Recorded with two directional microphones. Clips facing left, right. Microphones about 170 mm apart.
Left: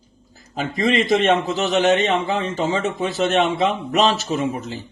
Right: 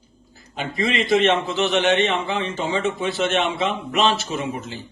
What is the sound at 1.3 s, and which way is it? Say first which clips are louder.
Speech: left 2 dB; 40° left (ahead or behind).